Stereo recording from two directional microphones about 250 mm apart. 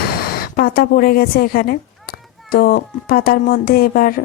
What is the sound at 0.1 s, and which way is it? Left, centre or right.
A woman's voice, left.